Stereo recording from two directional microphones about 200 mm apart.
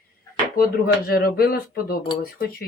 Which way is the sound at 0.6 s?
50° left (ahead or behind).